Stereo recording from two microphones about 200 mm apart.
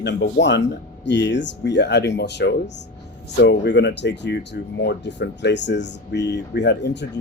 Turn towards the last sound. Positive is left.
turn(degrees=60)  # may be behind; listen again after turning